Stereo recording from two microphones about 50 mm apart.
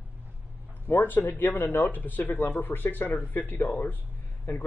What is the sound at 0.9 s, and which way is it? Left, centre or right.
Speech, left.